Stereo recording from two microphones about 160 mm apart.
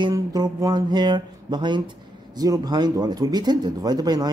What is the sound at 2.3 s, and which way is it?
Speech, 25° right (ahead or behind).